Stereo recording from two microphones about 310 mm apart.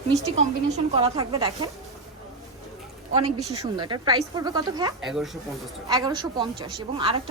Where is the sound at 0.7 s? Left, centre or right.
Centre.